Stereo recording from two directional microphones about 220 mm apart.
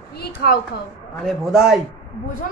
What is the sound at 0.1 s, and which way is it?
Speech, 45° left (ahead or behind).